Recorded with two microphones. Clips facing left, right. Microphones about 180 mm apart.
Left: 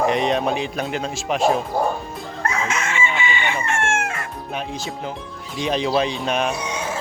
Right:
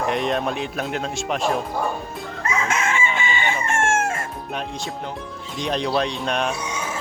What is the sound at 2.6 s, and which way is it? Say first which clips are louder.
Chicken: right 1 dB; 55° right (ahead or behind).